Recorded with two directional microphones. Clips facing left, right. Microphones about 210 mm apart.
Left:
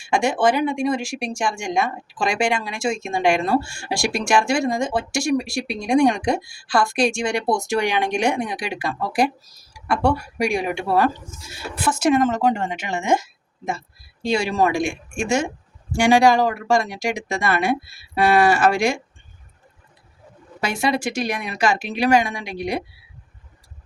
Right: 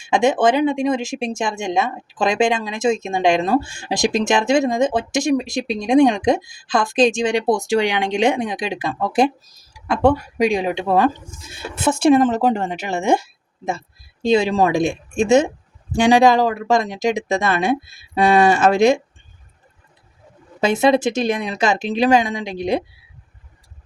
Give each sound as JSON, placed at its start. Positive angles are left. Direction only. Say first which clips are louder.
{"t": 0.1, "sound": "speech", "louder": "right 3 dB", "side_deg": -20}
{"t": 10.3, "sound": "speech", "louder": "right 4 dB", "side_deg": -90}
{"t": 10.7, "sound": "speech", "louder": "right 3 dB", "side_deg": -20}
{"t": 13.7, "sound": "speech", "louder": "right 2 dB", "side_deg": -25}
{"t": 20.6, "sound": "speech", "louder": "right 7 dB", "side_deg": -20}